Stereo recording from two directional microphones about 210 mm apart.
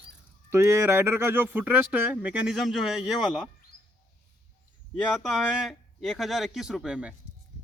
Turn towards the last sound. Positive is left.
turn(degrees=-5)  # may be behind; listen again after turning